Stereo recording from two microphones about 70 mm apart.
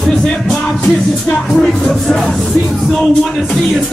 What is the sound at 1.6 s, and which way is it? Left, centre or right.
Music, centre.